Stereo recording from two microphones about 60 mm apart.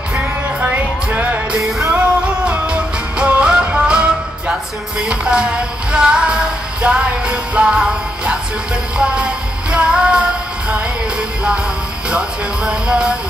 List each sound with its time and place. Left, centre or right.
0.6 s music: right